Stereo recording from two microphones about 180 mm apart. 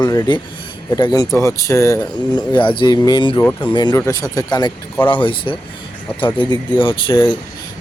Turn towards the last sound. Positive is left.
turn(degrees=25)  # may be behind; listen again after turning